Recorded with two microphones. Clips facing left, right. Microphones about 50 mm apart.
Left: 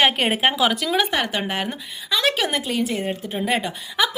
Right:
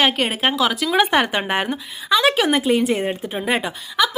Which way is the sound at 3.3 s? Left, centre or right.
Centre.